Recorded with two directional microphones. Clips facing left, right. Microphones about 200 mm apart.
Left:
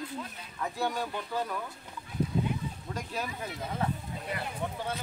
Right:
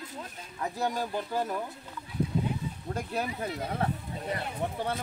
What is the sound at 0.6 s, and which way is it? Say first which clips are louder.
Speech: right 1 dB; 40° right (ahead or behind).